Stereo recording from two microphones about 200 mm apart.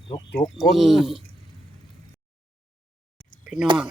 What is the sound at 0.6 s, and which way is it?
Speech, centre (ahead or behind).